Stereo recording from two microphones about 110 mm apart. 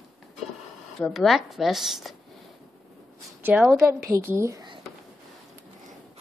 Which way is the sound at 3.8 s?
25° right (ahead or behind).